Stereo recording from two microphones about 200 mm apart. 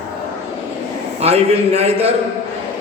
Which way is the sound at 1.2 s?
30° right (ahead or behind).